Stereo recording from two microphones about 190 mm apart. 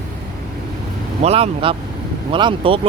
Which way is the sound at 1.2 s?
30° right (ahead or behind).